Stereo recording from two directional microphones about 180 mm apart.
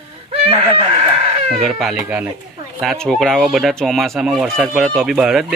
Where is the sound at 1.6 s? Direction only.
Centre (ahead or behind).